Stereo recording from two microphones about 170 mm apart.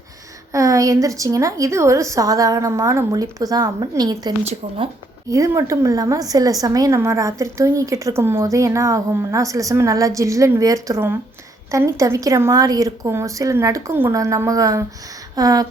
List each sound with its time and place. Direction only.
0.5 s a woman's voice: 20° right (ahead or behind)